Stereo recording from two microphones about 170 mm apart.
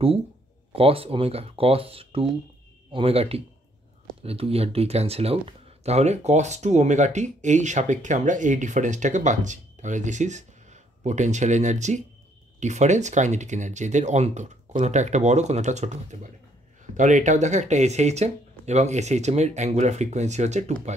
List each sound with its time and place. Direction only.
0.7 s speech: 35° right (ahead or behind)